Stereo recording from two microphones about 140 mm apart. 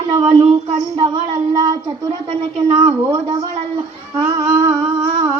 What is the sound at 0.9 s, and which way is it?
Speech, 35° right (ahead or behind).